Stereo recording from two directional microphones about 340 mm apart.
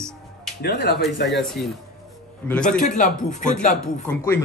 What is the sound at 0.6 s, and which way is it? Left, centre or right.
Speech, left.